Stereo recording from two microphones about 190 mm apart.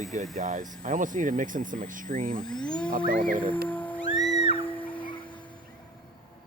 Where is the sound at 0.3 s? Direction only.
45° right (ahead or behind).